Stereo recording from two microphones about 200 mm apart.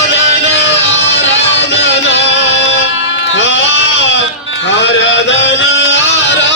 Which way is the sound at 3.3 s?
65° left (ahead or behind).